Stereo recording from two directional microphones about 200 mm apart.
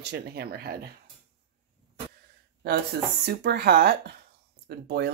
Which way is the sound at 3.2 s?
50° right (ahead or behind).